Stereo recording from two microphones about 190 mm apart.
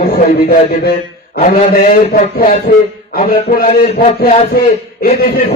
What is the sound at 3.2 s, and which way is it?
Speech, 35° left (ahead or behind).